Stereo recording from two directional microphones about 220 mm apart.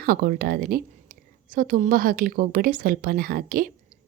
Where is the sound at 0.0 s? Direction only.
40° right (ahead or behind).